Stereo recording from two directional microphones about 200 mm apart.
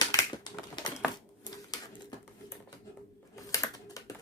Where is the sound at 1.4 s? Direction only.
20° left (ahead or behind).